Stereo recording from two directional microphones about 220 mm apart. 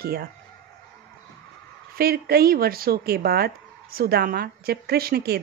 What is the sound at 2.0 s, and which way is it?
Speech, 45° right (ahead or behind).